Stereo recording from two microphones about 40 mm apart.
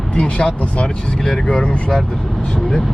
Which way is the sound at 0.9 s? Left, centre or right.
Left.